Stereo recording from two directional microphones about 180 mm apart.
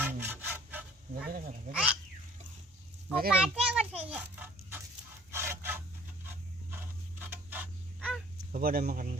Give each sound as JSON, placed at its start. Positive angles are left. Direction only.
{"t": 0.0, "sound": "sawing", "side_deg": -10}
{"t": 1.7, "sound": "a sound", "side_deg": -5}
{"t": 3.2, "sound": "a child's voice", "side_deg": -5}
{"t": 5.3, "sound": "wood", "side_deg": -15}
{"t": 6.2, "sound": "a sound", "side_deg": -10}
{"t": 8.5, "sound": "speech", "side_deg": -55}